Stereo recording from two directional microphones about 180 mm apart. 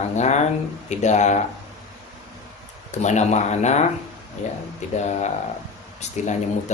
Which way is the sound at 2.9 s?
40° left (ahead or behind).